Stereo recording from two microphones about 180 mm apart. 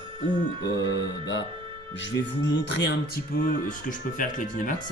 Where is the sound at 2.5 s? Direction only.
80° left.